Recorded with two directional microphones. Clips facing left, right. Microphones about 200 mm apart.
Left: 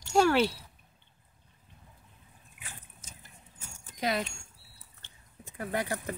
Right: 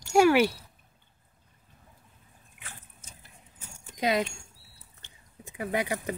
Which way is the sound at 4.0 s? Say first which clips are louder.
Right 4 dB; 20° right (ahead or behind).